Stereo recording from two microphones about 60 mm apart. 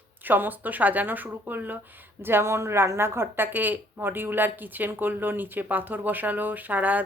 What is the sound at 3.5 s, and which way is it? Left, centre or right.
Speech, right.